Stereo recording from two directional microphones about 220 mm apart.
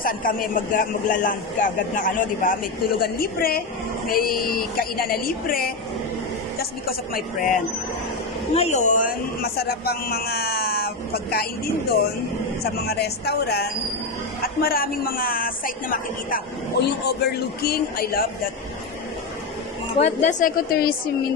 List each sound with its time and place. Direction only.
0.0 s a man's voice: 40° left (ahead or behind)
20.0 s a man's voice: 30° left (ahead or behind)